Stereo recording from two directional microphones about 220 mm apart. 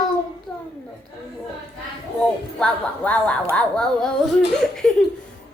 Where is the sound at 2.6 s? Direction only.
5° left (ahead or behind).